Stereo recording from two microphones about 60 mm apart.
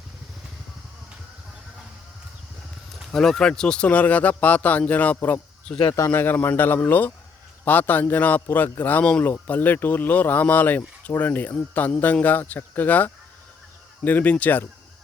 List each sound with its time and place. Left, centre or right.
3.1 s speech: centre; by 14.6 s left